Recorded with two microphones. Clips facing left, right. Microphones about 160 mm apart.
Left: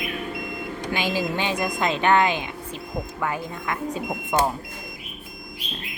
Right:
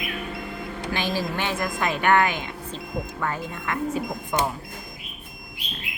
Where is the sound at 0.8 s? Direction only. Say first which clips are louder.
Left 1 dB; 15° left (ahead or behind).